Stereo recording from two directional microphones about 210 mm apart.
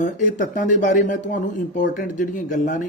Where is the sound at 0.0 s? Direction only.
40° left (ahead or behind).